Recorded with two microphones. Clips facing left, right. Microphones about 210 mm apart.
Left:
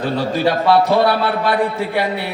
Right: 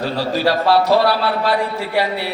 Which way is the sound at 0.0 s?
55° left (ahead or behind).